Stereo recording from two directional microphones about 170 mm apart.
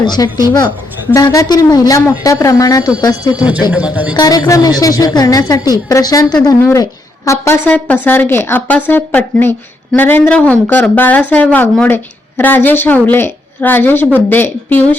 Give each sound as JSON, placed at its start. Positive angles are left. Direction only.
{"t": 0.0, "sound": "a woman's voice", "side_deg": 25}
{"t": 0.3, "sound": "a man's voice", "side_deg": -15}
{"t": 1.1, "sound": "a woman's voice", "side_deg": 20}
{"t": 3.7, "sound": "a man's voice", "side_deg": -10}
{"t": 4.1, "sound": "a woman's voice", "side_deg": 25}